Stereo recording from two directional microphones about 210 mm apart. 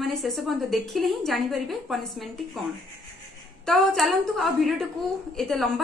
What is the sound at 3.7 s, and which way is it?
A woman's voice, centre (ahead or behind).